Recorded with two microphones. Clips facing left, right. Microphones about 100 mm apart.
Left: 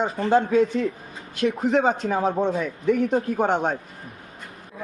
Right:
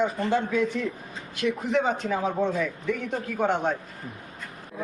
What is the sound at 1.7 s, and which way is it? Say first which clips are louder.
A man's voice: left 3 dB; 40° left (ahead or behind).